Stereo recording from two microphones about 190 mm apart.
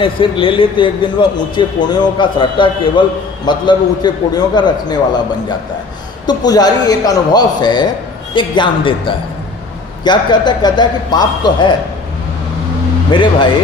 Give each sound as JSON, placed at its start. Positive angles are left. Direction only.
{"t": 0.0, "sound": "a man's voice", "side_deg": 25}
{"t": 13.1, "sound": "a man's voice", "side_deg": 25}